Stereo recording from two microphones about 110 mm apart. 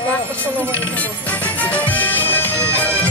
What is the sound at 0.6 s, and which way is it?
Music, 15° left (ahead or behind).